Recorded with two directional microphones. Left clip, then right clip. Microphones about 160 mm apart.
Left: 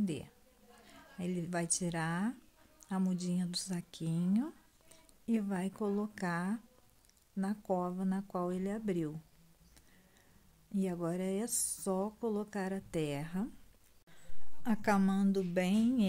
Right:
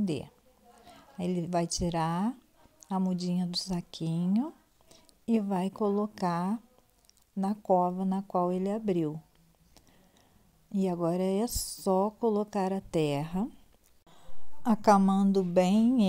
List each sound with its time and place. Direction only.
0.0 s speech: 25° right (ahead or behind)
10.7 s speech: 25° right (ahead or behind)
14.6 s a woman's voice: 30° right (ahead or behind)